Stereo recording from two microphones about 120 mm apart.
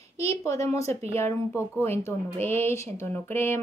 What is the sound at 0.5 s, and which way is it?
Speech, 25° left (ahead or behind).